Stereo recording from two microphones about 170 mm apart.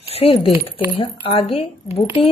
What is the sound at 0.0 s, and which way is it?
Speech, 35° left (ahead or behind).